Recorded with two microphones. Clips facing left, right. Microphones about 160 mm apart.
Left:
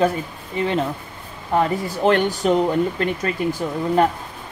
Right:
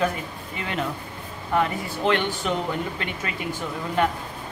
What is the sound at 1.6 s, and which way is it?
Speech, 40° left (ahead or behind).